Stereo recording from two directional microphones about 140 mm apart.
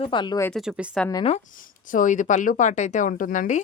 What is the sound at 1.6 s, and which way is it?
Speech, 70° left (ahead or behind).